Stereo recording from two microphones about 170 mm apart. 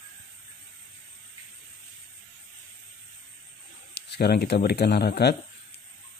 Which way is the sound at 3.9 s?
75° left (ahead or behind).